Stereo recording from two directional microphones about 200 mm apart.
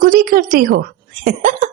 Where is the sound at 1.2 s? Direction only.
40° right (ahead or behind).